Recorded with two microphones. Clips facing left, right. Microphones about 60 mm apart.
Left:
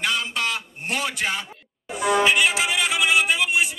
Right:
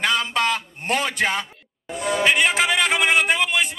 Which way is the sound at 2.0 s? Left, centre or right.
Left.